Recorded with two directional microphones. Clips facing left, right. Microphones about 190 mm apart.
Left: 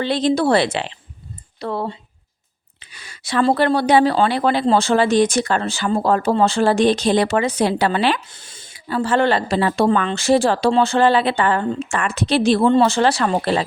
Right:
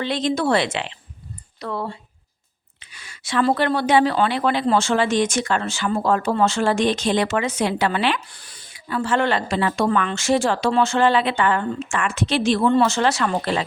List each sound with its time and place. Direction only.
0.0 s speech: 35° left (ahead or behind)
8.3 s speech: 25° left (ahead or behind)